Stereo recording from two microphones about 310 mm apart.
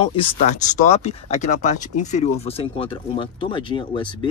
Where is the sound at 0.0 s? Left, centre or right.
Centre.